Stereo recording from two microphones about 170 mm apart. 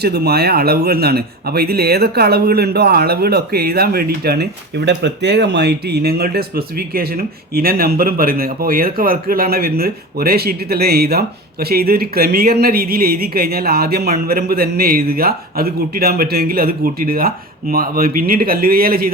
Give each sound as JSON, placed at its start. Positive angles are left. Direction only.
{"t": 0.0, "sound": "speech", "side_deg": -70}
{"t": 4.9, "sound": "speech", "side_deg": -90}